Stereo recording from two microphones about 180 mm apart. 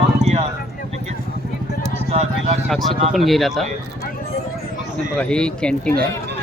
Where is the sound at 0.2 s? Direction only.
40° right (ahead or behind).